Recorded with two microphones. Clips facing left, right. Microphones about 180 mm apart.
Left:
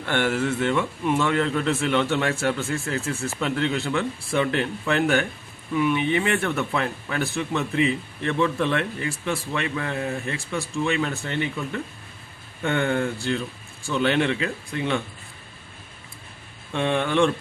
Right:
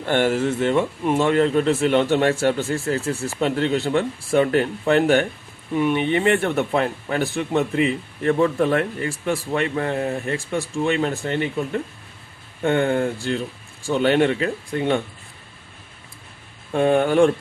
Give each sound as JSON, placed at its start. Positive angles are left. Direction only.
{"t": 0.0, "sound": "speech", "side_deg": -45}
{"t": 16.7, "sound": "speech", "side_deg": -40}